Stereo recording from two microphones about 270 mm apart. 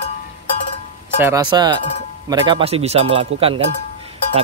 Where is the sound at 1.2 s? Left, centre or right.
Centre.